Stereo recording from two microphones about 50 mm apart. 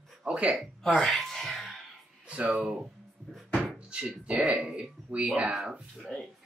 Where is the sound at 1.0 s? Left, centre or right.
Centre.